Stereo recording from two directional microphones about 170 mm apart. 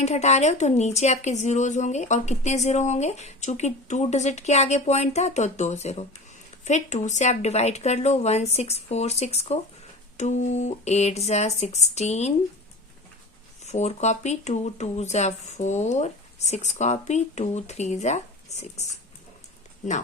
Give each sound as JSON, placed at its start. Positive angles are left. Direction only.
{"t": 0.0, "sound": "speech", "side_deg": 40}
{"t": 13.7, "sound": "speech", "side_deg": 40}